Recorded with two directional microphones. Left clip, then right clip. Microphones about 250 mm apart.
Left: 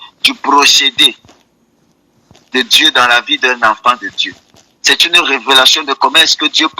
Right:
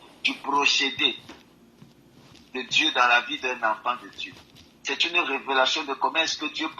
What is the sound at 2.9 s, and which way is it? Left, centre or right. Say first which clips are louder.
Speech: left 11 dB; left.